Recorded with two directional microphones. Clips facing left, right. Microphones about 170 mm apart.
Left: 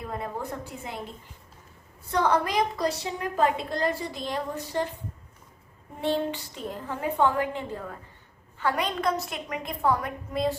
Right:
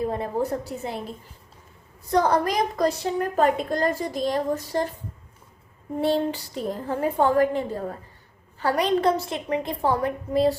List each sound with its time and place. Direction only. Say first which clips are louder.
0.0 s a woman's voice: right 8 dB; 30° right (ahead or behind)
2.0 s a woman's voice: right 4 dB; 40° right (ahead or behind)
6.0 s a woman's voice: right 4 dB; 35° right (ahead or behind)